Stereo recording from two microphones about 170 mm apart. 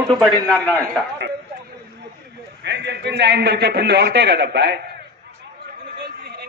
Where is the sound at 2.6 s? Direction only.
90° right.